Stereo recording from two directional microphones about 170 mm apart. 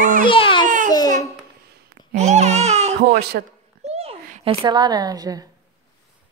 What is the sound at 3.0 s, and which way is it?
Speech, 70° right (ahead or behind).